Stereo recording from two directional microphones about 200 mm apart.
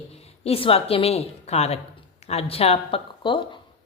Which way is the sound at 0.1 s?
30° left (ahead or behind).